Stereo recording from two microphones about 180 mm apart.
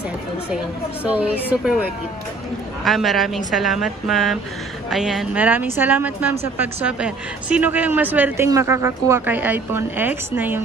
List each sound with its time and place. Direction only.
1.0 s a woman's voice: 10° right (ahead or behind)